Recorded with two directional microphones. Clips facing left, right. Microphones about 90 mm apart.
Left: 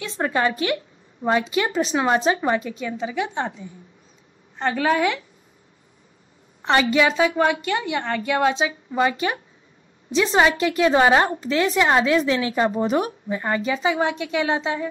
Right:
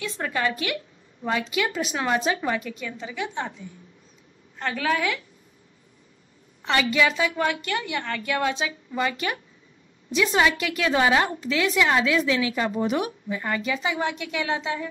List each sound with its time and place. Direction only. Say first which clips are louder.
0.0 s a woman's voice: left 4 dB; 25° left (ahead or behind)
4.6 s a woman's voice: left 5 dB; 20° left (ahead or behind)
6.6 s a woman's voice: left 4 dB; 30° left (ahead or behind)